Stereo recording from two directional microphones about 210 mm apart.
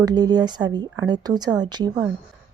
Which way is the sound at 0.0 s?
20° right (ahead or behind).